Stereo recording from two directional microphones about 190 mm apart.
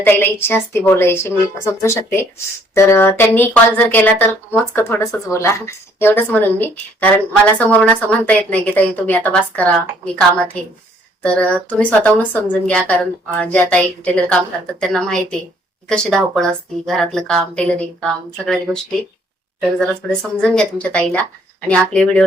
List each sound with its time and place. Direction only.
0.0 s a woman's voice: 10° left (ahead or behind)